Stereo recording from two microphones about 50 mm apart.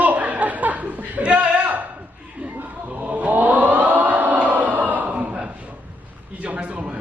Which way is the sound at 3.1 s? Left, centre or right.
Right.